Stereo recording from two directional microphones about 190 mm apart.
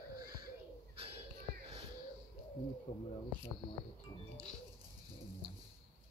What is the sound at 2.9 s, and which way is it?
Speech, 40° left (ahead or behind).